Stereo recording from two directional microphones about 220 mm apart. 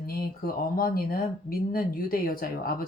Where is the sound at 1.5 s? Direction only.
40° left (ahead or behind).